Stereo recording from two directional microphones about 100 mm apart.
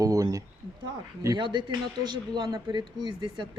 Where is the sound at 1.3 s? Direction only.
55° right (ahead or behind).